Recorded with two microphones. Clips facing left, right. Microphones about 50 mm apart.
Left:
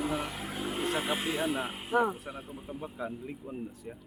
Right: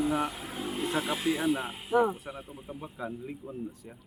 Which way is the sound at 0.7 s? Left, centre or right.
Left.